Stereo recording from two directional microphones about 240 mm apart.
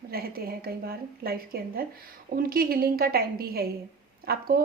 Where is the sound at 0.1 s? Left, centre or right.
Right.